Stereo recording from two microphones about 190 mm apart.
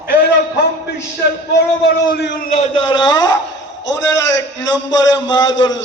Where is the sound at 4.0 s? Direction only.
70° left (ahead or behind).